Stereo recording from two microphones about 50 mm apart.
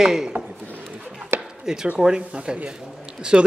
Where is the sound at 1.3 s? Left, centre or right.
Right.